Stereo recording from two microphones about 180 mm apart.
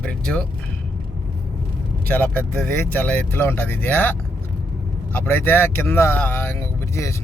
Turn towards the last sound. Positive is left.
turn(degrees=15)  # may be behind; listen again after turning